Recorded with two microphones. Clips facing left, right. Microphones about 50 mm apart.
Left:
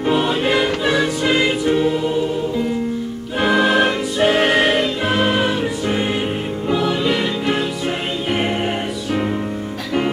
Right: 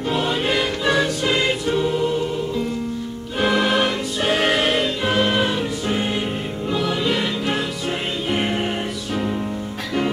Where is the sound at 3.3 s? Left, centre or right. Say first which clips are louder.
Left 3 dB; centre.